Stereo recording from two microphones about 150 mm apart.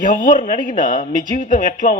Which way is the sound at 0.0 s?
60° left (ahead or behind).